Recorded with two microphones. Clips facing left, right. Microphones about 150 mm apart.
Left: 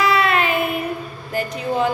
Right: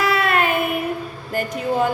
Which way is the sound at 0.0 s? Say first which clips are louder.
Left 1 dB; 50° right (ahead or behind).